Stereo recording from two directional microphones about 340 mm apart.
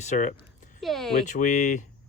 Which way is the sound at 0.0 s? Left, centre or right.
Left.